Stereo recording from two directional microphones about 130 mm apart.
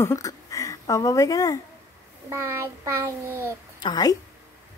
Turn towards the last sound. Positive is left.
turn(degrees=30)  # may be behind; listen again after turning